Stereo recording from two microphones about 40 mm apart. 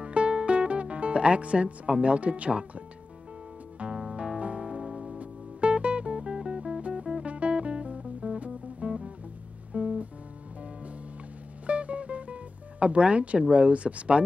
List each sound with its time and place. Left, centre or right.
0.0 s music: right
3.9 s music: centre
4.4 s music: right
4.6 s music: centre
5.2 s music: right
11.6 s music: right